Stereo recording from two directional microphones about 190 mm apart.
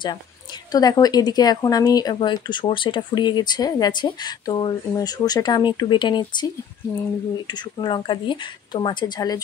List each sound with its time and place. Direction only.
0.7 s speech: 20° left (ahead or behind)
7.4 s speech: 25° left (ahead or behind)